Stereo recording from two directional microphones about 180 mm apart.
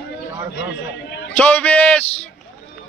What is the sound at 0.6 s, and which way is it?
Speech, 80° left.